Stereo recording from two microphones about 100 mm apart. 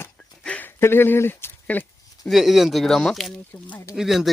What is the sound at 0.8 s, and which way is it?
Speech, 25° left (ahead or behind).